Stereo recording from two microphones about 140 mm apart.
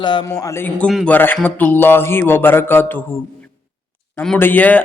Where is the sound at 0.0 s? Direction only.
35° left (ahead or behind); by 3.2 s 15° left (ahead or behind).